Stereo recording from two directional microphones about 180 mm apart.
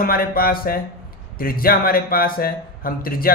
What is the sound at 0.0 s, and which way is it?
Speech, 55° left (ahead or behind).